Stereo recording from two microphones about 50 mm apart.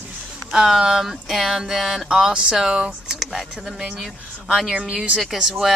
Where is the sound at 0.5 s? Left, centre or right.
Centre.